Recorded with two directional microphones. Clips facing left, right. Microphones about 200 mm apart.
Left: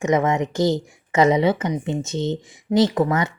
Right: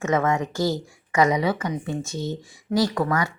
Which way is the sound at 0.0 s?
15° left (ahead or behind).